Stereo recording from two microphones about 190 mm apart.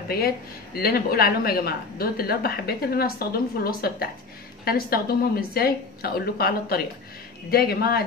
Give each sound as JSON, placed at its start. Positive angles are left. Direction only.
{"t": 0.7, "sound": "a woman's voice", "side_deg": 55}